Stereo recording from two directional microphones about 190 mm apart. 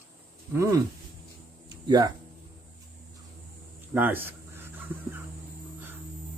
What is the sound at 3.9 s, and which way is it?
Crow, 10° right (ahead or behind).